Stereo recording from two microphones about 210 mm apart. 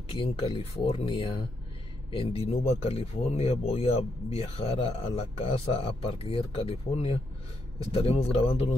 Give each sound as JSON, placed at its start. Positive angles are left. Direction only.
{"t": 0.1, "sound": "speech", "side_deg": 25}